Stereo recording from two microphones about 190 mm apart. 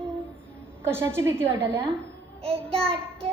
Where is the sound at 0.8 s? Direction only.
10° right (ahead or behind).